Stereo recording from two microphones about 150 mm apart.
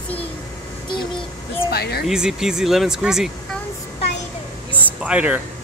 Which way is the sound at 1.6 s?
90° left.